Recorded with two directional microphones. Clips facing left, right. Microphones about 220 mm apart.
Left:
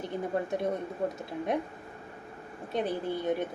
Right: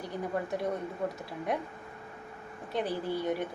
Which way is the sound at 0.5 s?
20° left (ahead or behind).